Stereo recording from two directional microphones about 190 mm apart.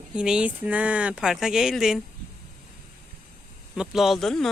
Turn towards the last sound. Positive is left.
turn(degrees=0)  # may be behind; listen again after turning